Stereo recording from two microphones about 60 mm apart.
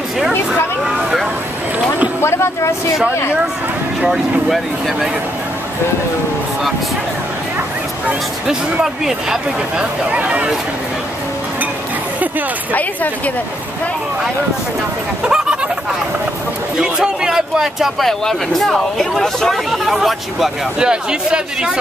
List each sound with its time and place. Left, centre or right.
0.5 s vehicle: centre
2.2 s a sound: left
4.0 s speech: centre
8.8 s speech: centre
10.0 s speech: right
16.7 s speech: centre
18.0 s speech: centre
20.9 s speech: centre